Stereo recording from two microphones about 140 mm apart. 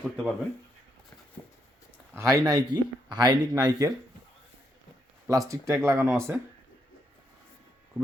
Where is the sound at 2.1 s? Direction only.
25° right (ahead or behind).